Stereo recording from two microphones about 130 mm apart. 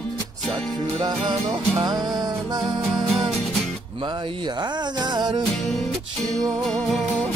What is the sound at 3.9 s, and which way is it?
Music, 40° right (ahead or behind).